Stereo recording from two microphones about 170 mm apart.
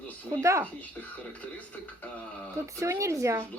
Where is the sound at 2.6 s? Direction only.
15° right (ahead or behind).